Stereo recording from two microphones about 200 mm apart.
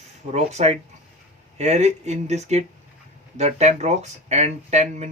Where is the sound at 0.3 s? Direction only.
35° right (ahead or behind).